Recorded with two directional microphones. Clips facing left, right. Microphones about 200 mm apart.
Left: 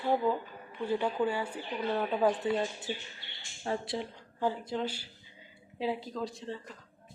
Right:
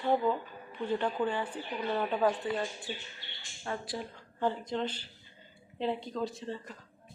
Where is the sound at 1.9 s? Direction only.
Centre (ahead or behind).